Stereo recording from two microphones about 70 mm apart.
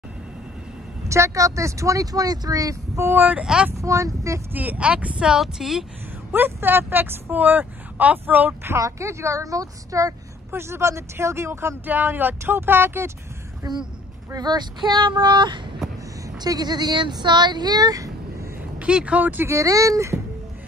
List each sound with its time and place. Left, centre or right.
1.0 s speech: right
3.2 s speech: right
3.7 s speech: right
4.6 s speech: right; by 5.9 s centre
6.3 s speech: right
8.8 s speech: right
10.5 s speech: right
11.8 s speech: right
13.6 s speech: right
16.3 s speech: right
18.8 s speech: centre
19.4 s speech: right